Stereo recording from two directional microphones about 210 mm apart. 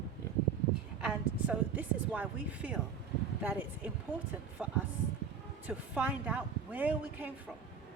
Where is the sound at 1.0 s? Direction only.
5° right (ahead or behind).